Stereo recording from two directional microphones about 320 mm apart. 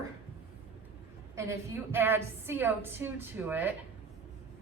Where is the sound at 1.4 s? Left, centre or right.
Centre.